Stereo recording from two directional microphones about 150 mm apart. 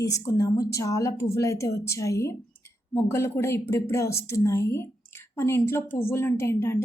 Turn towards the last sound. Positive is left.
turn(degrees=15)  # may be behind; listen again after turning